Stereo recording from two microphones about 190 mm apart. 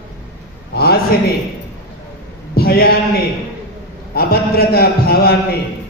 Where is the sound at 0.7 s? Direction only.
55° left (ahead or behind).